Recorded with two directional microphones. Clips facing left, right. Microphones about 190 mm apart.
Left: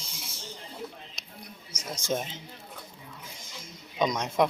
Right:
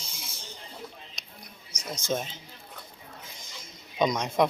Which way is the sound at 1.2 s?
10° left (ahead or behind).